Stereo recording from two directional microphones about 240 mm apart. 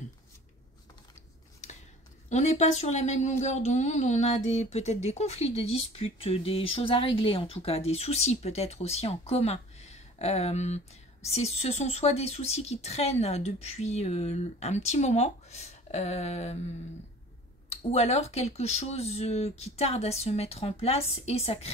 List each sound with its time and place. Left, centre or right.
2.2 s a woman's voice: left
17.6 s a woman's voice: left